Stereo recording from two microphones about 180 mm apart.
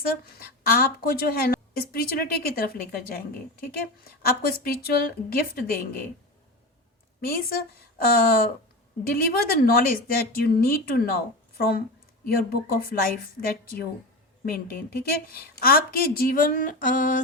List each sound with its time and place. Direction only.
0.0 s a woman's voice: 55° left (ahead or behind)
4.3 s a woman's voice: 55° left (ahead or behind)
7.3 s a woman's voice: 55° left (ahead or behind)